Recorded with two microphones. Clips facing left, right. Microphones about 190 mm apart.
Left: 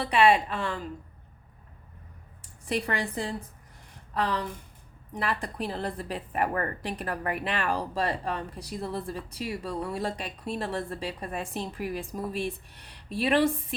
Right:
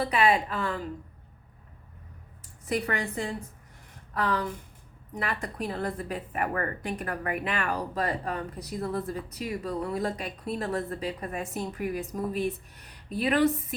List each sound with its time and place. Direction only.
0.0 s speech: 30° left (ahead or behind)
2.6 s a woman's voice: 30° left (ahead or behind)